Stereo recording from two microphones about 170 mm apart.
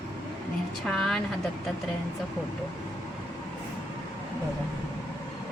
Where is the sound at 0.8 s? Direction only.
5° left (ahead or behind).